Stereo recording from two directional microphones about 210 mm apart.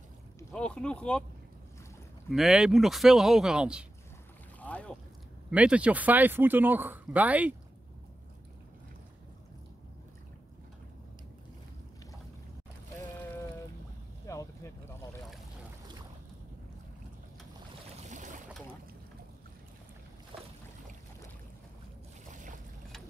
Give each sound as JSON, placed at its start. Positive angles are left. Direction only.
{"t": 0.4, "sound": "speech", "side_deg": 10}
{"t": 2.3, "sound": "speech", "side_deg": 0}
{"t": 4.6, "sound": "boat", "side_deg": 5}
{"t": 5.5, "sound": "speech", "side_deg": -5}
{"t": 14.2, "sound": "boat", "side_deg": 15}
{"t": 18.0, "sound": "boat", "side_deg": -35}
{"t": 22.3, "sound": "boat", "side_deg": -35}